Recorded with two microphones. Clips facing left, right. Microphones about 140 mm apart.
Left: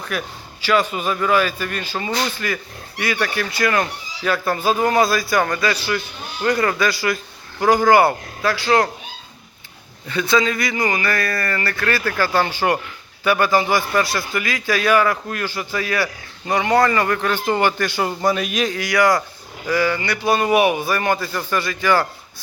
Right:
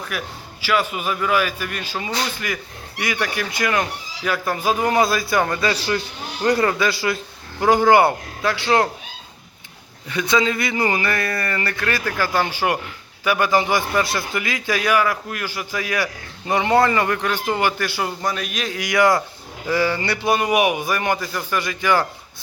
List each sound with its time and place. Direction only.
0.1 s speech: 10° right (ahead or behind); by 6.7 s 35° right (ahead or behind)
6.7 s a man's voice: 20° right (ahead or behind)
10.1 s speech: 15° right (ahead or behind); by 18.8 s centre (ahead or behind)
18.8 s a man's voice: 20° right (ahead or behind)
20.3 s speech: 15° right (ahead or behind)